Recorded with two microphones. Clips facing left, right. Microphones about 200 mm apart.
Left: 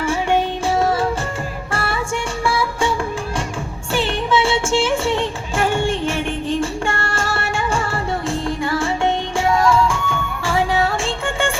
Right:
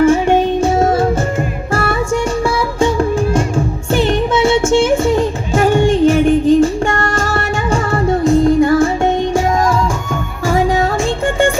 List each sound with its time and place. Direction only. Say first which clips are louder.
0.0 s music: right 8 dB; 40° right (ahead or behind)
3.9 s music: right 5 dB; 40° right (ahead or behind)